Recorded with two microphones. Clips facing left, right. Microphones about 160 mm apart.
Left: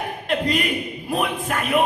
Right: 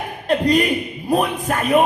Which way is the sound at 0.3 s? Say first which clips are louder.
Right 6 dB; 40° right (ahead or behind).